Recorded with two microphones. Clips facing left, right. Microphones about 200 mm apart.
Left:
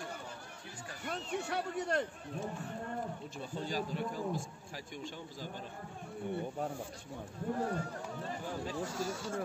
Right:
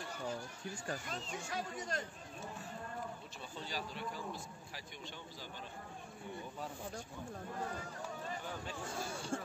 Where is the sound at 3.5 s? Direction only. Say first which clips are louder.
Left 7 dB; 45° left (ahead or behind).